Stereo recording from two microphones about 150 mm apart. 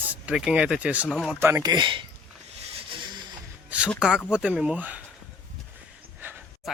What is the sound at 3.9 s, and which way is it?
Speech, 5° right (ahead or behind).